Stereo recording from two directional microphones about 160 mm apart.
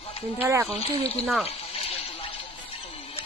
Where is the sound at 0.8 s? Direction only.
40° left (ahead or behind).